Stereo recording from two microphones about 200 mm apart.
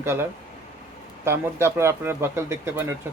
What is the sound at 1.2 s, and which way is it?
Speech, 10° right (ahead or behind).